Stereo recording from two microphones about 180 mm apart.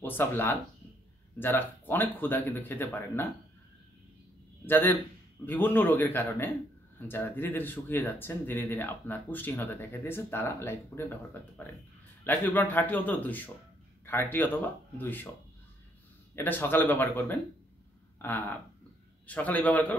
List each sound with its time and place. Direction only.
0.0 s speech: 10° left (ahead or behind)
4.6 s speech: 10° left (ahead or behind)
12.3 s speech: 10° left (ahead or behind)
16.3 s speech: 10° left (ahead or behind)